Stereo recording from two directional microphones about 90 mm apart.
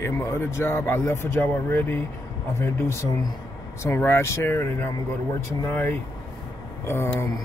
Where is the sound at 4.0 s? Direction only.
30° left (ahead or behind).